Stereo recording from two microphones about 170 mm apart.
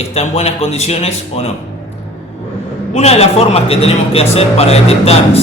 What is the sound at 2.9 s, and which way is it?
Speech, 40° left (ahead or behind).